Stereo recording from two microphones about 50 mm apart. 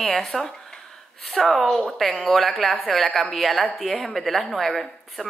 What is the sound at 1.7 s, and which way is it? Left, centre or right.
Speech, centre.